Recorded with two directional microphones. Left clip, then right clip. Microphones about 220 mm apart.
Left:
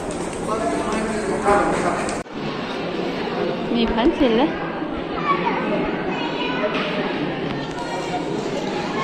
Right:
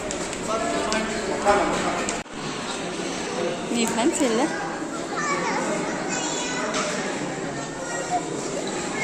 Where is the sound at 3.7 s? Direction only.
15° right (ahead or behind).